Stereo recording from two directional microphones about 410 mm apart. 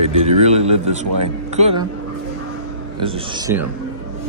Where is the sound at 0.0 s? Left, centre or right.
Centre.